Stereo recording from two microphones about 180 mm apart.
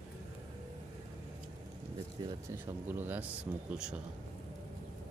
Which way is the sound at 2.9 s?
10° right (ahead or behind).